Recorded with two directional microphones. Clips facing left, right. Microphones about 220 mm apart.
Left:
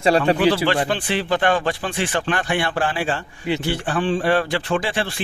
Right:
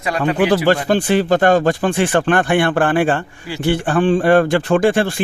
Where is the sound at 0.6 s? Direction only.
45° right (ahead or behind).